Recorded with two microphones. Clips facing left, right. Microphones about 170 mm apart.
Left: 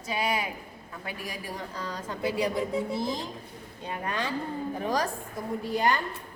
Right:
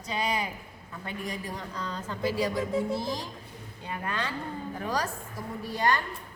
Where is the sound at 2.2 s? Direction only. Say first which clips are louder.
Left 1 dB; 20° left (ahead or behind).